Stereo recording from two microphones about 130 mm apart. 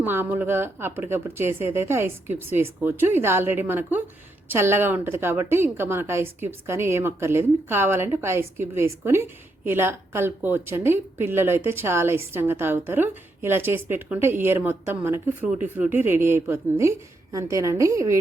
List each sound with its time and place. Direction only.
0.0 s a woman's voice: 15° right (ahead or behind)